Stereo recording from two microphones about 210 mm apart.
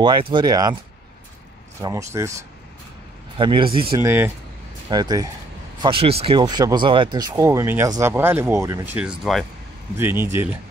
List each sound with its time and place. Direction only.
0.0 s speech: 20° right (ahead or behind)
1.8 s speech: 15° right (ahead or behind)
4.0 s speech: 10° right (ahead or behind)
8.9 s speech: centre (ahead or behind)
9.9 s speech: 10° right (ahead or behind)